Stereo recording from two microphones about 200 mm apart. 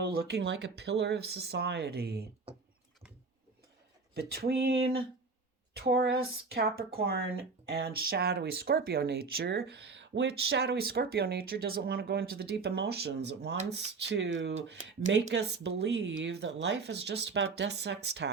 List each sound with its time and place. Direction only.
0.0 s speech: 50° right (ahead or behind)
4.1 s speech: 50° right (ahead or behind)
5.7 s speech: 55° right (ahead or behind)